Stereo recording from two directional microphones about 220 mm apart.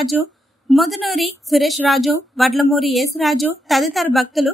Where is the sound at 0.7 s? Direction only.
Centre (ahead or behind).